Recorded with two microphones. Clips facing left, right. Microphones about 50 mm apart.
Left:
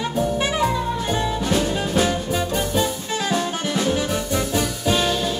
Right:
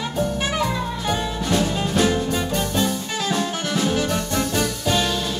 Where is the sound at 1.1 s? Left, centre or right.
Centre.